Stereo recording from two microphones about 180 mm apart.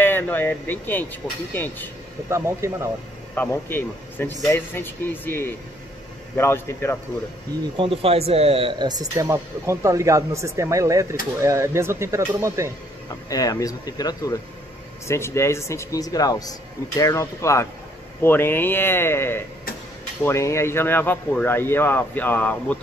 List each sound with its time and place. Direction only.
0.0 s speech: 10° left (ahead or behind)
2.2 s speech: 15° right (ahead or behind)
3.3 s speech: 10° left (ahead or behind)
7.7 s speech: 30° right (ahead or behind)
13.3 s speech: 20° left (ahead or behind)